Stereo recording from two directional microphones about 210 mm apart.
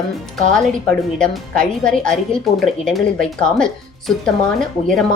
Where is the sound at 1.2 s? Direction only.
5° left (ahead or behind).